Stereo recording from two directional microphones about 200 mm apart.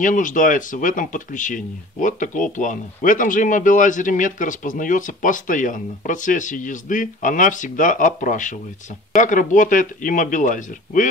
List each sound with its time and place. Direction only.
0.0 s speech: 40° left (ahead or behind)